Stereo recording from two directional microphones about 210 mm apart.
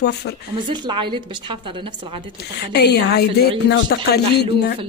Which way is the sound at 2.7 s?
50° left (ahead or behind).